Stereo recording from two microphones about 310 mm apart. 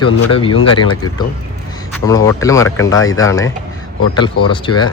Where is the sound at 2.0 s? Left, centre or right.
Centre.